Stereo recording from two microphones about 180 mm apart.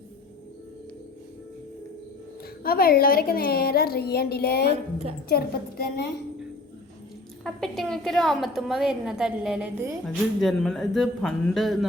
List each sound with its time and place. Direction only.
2.6 s a woman's voice: 55° left (ahead or behind)
7.4 s a woman's voice: centre (ahead or behind)